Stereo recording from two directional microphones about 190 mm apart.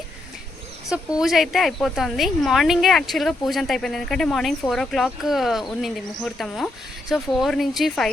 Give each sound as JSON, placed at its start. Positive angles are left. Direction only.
{"t": 0.9, "sound": "speech", "side_deg": 0}